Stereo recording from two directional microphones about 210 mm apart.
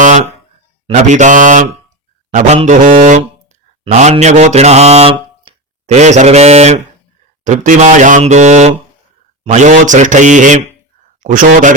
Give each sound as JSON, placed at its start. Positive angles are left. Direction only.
{"t": 0.0, "sound": "a sound", "side_deg": -35}
{"t": 0.9, "sound": "speech", "side_deg": -35}
{"t": 3.8, "sound": "mantra", "side_deg": -35}
{"t": 7.4, "sound": "speech", "side_deg": -35}